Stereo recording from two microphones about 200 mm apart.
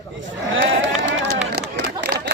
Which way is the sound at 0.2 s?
65° right (ahead or behind).